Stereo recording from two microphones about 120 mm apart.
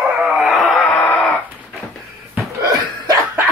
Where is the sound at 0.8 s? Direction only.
15° left (ahead or behind).